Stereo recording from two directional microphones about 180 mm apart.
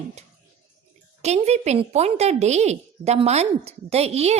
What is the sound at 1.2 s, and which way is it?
Speech, 35° right (ahead or behind).